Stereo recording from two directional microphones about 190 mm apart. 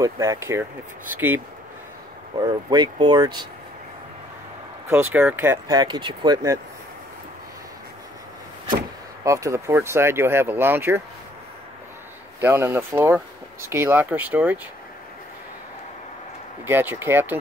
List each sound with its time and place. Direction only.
0.0 s speech: 15° right (ahead or behind)
2.3 s speech: 25° right (ahead or behind)
4.9 s speech: 10° right (ahead or behind)
9.2 s speech: 15° right (ahead or behind)
12.4 s speech: 10° right (ahead or behind)
16.6 s speech: 10° right (ahead or behind)